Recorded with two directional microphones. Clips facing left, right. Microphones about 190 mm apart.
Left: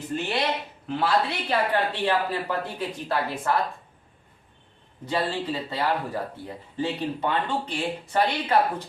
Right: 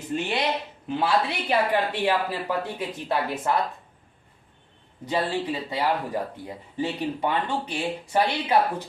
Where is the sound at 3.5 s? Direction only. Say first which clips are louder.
Even; 20° right (ahead or behind).